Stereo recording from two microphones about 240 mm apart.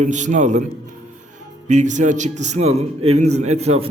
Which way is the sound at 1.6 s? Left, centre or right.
Right.